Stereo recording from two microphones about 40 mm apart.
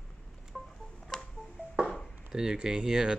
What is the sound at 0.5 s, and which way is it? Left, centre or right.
Tick-tock, centre.